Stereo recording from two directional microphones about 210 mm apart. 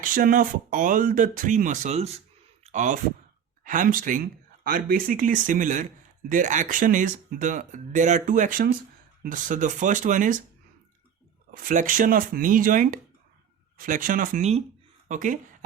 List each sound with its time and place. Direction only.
0.0 s speech: 40° right (ahead or behind)
11.5 s speech: 40° right (ahead or behind)